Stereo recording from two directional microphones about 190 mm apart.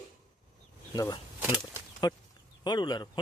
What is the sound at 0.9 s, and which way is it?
Speech, 20° left (ahead or behind).